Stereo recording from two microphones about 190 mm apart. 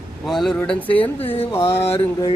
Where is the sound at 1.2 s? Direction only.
30° left (ahead or behind).